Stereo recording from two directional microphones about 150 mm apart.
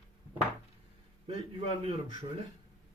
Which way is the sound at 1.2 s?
35° right (ahead or behind).